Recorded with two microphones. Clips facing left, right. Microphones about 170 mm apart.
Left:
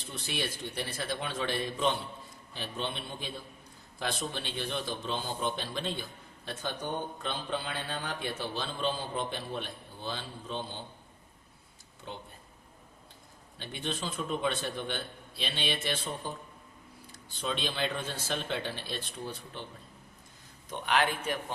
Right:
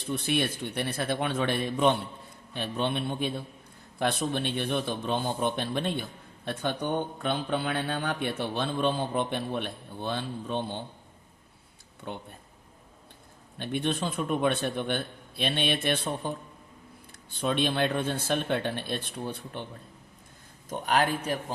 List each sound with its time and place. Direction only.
0.1 s a man's voice: 60° right (ahead or behind)
12.0 s a man's voice: 60° right (ahead or behind)
13.6 s a man's voice: 60° right (ahead or behind)
17.3 s a man's voice: 55° right (ahead or behind)
20.7 s a man's voice: 40° right (ahead or behind)